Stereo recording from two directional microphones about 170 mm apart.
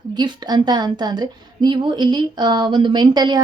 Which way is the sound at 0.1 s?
25° right (ahead or behind).